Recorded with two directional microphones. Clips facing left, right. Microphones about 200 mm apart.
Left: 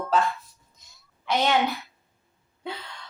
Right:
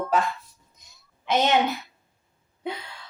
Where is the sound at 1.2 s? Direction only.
20° right (ahead or behind).